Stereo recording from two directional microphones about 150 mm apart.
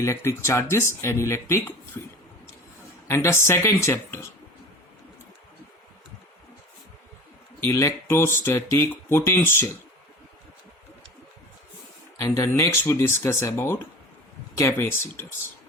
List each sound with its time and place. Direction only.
0.0 s speech: 20° left (ahead or behind)
3.1 s speech: 15° left (ahead or behind)
7.7 s speech: 20° left (ahead or behind)
12.1 s speech: 20° left (ahead or behind)